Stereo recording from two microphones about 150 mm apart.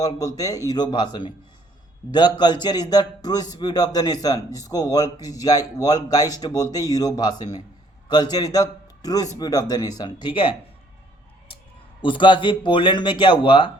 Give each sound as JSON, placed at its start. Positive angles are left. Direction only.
{"t": 0.0, "sound": "speech", "side_deg": 25}
{"t": 12.0, "sound": "speech", "side_deg": 35}